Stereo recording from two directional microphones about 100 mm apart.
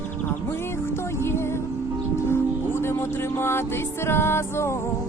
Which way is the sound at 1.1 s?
25° left (ahead or behind).